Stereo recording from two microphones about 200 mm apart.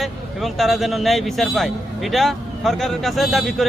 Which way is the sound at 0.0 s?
Centre (ahead or behind).